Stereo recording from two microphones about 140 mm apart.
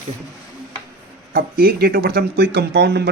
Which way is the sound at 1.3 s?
90° right.